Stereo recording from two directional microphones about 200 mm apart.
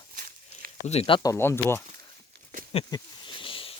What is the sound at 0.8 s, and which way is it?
Speech, 30° left (ahead or behind).